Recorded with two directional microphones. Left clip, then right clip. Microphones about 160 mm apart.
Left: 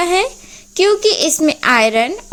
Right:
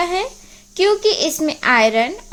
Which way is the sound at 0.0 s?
25° left (ahead or behind).